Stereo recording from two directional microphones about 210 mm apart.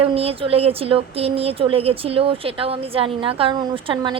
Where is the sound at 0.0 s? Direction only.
30° right (ahead or behind).